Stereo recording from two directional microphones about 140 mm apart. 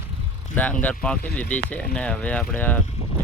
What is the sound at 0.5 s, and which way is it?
Speech, 10° left (ahead or behind).